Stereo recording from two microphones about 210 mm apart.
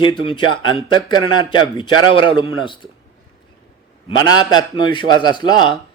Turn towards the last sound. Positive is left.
turn(degrees=20)  # may be behind; listen again after turning